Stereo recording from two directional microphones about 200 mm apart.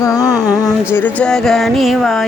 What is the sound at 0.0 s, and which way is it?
Music, 15° left (ahead or behind).